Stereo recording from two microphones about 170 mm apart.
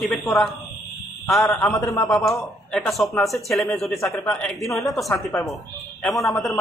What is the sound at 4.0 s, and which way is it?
Speech, 20° left (ahead or behind).